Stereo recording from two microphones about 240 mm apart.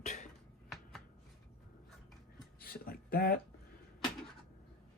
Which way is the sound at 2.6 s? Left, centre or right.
Left.